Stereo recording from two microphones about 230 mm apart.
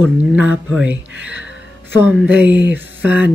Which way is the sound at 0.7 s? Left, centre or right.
Centre.